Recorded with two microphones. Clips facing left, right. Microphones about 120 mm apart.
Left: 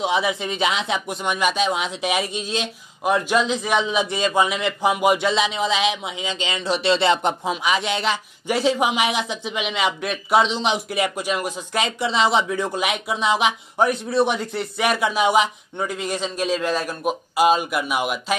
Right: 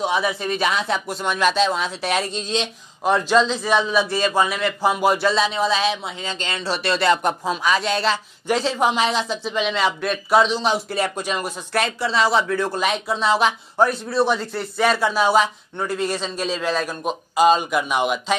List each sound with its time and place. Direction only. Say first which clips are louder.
0.0 s speech: even; 25° left (ahead or behind); by 18.2 s 5° left (ahead or behind)